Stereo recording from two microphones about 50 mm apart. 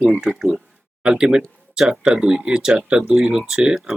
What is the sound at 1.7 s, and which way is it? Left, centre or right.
Speech, centre.